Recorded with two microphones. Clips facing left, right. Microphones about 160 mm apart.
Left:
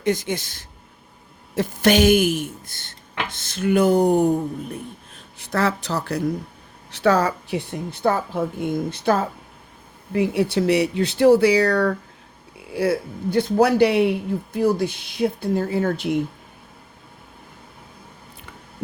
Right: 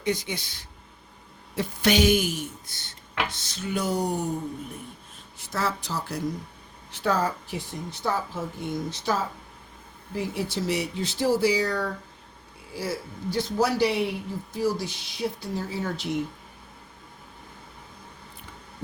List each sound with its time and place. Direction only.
0.0 s a woman's voice: 45° left (ahead or behind); by 6.3 s 70° left (ahead or behind)
6.9 s a woman's voice: 80° left; by 16.1 s 55° left (ahead or behind)